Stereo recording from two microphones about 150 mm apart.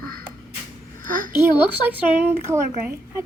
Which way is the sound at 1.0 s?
65° right (ahead or behind).